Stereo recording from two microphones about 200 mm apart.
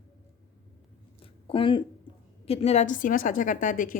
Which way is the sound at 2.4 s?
30° left (ahead or behind).